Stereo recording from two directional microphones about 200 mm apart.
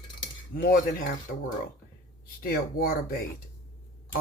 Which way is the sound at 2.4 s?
50° left (ahead or behind).